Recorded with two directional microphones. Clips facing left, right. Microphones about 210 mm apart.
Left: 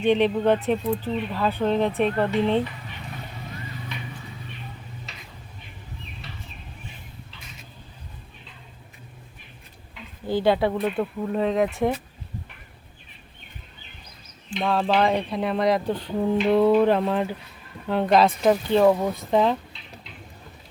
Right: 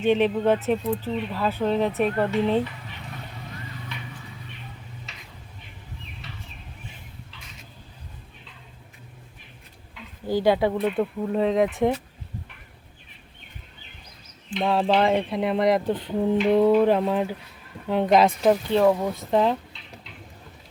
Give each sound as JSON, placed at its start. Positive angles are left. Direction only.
{"t": 0.0, "sound": "speech", "side_deg": -5}
{"t": 5.1, "sound": "tick-tock", "side_deg": 35}
{"t": 10.2, "sound": "speech", "side_deg": -10}
{"t": 14.5, "sound": "speech", "side_deg": -20}
{"t": 18.4, "sound": "speech", "side_deg": 0}